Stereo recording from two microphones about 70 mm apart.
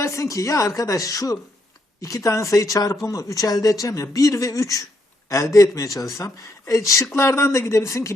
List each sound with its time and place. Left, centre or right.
0.0 s speech: left